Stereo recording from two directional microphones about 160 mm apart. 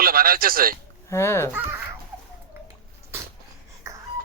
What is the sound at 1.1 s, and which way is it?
Speech, 15° left (ahead or behind).